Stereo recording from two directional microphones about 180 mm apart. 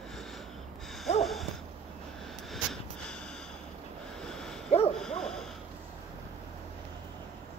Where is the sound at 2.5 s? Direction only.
Centre (ahead or behind).